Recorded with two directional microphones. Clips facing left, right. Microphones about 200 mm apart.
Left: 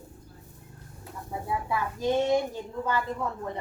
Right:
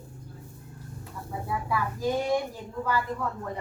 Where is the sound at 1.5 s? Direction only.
25° left (ahead or behind).